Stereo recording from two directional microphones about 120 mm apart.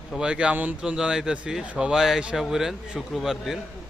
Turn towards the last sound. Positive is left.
turn(degrees=0)  # may be behind; listen again after turning